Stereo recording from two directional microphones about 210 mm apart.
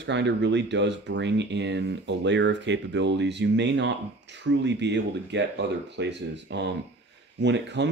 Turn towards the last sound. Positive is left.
turn(degrees=-55)  # may be behind; listen again after turning